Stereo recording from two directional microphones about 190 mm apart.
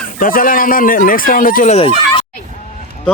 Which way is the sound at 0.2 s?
45° left (ahead or behind).